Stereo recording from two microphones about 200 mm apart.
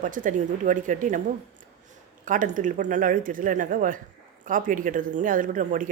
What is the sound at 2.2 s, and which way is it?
Speech, 40° right (ahead or behind).